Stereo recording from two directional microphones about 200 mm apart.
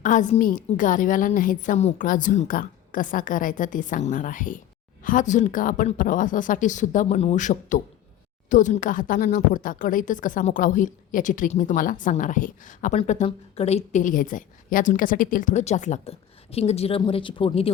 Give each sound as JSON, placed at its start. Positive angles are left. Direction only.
{"t": 0.0, "sound": "a woman's voice", "side_deg": 40}